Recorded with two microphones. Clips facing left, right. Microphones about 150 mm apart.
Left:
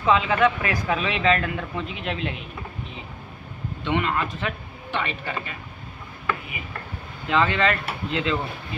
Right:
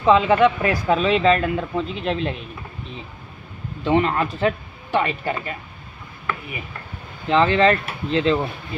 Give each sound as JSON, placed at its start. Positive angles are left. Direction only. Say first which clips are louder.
{"t": 0.0, "sound": "speech", "louder": "right 5 dB", "side_deg": -30}
{"t": 3.8, "sound": "speech", "louder": "right 6 dB", "side_deg": -35}
{"t": 7.2, "sound": "speech", "louder": "right 5 dB", "side_deg": -30}